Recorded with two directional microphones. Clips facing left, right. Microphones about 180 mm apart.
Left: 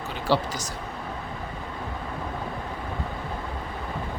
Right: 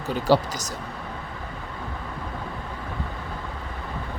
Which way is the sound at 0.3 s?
45° right (ahead or behind).